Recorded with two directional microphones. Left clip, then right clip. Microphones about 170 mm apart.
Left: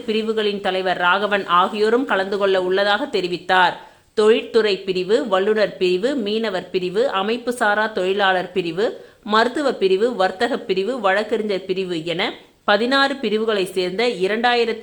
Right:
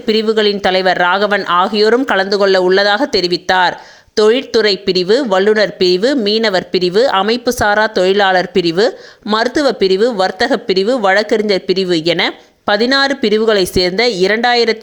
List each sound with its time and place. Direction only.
0.0 s speech: 40° right (ahead or behind)